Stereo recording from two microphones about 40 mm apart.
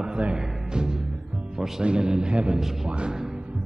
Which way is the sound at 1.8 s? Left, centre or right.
Right.